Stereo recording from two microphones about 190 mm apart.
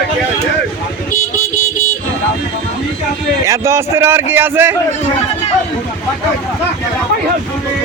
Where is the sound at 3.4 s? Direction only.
15° right (ahead or behind).